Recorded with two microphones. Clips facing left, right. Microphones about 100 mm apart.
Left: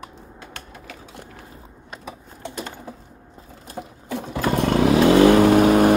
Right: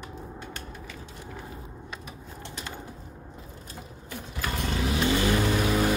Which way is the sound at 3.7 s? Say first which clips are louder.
Left 11 dB; 70° left (ahead or behind).